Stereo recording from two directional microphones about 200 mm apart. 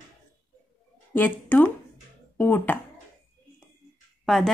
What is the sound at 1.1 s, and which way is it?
A woman's voice, 10° left (ahead or behind).